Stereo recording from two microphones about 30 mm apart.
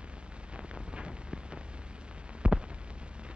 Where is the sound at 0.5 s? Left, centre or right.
Right.